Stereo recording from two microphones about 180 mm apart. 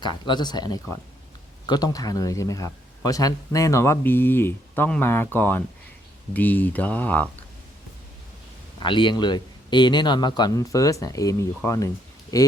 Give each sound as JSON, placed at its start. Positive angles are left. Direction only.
{"t": 0.0, "sound": "speech", "side_deg": 25}
{"t": 8.8, "sound": "speech", "side_deg": 25}